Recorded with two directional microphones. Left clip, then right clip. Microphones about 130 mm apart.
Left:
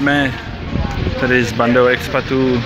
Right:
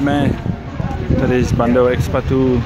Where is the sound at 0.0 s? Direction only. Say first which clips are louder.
Left 2 dB; 15° right (ahead or behind).